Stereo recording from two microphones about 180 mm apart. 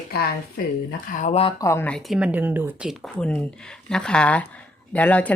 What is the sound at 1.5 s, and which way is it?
Speech, 15° left (ahead or behind).